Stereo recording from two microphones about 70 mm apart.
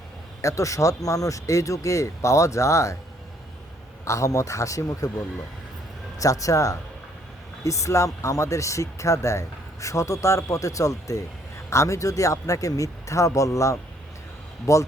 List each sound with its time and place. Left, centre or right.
0.4 s speech: left
4.0 s speech: left
6.1 s speech: left